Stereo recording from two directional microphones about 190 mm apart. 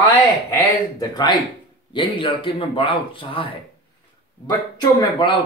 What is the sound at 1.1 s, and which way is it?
Speech, 25° left (ahead or behind).